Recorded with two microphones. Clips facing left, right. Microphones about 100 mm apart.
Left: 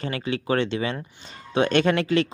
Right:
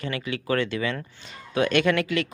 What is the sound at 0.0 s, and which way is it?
Speech, 30° left (ahead or behind).